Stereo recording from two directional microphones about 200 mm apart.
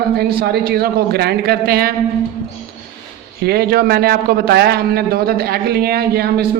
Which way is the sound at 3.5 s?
50° right (ahead or behind).